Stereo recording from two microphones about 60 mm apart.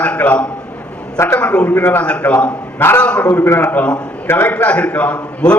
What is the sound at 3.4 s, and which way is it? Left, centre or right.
A man's voice, left.